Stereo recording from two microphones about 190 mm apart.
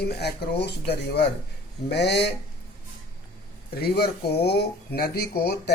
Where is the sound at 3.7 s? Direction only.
55° left (ahead or behind).